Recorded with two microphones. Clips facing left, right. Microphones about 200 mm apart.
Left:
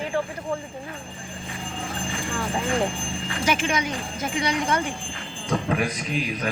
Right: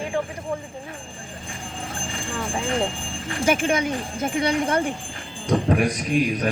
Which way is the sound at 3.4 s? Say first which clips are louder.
Right 4 dB; 50° right (ahead or behind).